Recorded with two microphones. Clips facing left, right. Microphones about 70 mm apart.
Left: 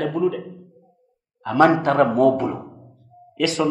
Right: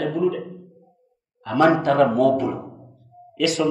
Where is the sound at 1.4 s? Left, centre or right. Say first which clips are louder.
Left 1 dB; left.